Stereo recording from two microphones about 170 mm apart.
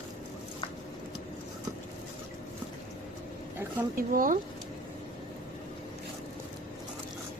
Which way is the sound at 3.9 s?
55° right (ahead or behind).